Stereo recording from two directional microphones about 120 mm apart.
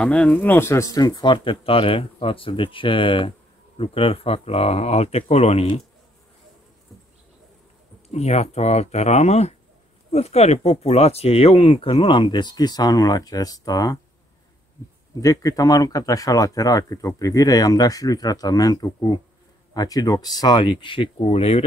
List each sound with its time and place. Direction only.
0.0 s speech: 5° left (ahead or behind); by 5.8 s 60° left (ahead or behind)
8.1 s speech: 65° left (ahead or behind); by 13.9 s 30° left (ahead or behind)
15.1 s speech: 30° left (ahead or behind); by 21.6 s 55° left (ahead or behind)